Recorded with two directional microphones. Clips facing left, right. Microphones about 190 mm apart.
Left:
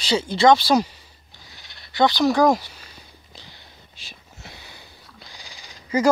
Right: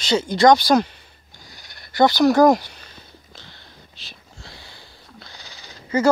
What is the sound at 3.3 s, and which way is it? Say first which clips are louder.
Sniff: left 1 dB; 15° left (ahead or behind).